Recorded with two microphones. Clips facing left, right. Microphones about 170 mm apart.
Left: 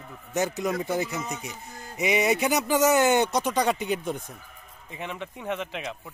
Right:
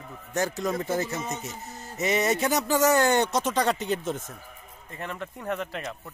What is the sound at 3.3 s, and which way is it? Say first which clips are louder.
Speech: left 1 dB; centre (ahead or behind).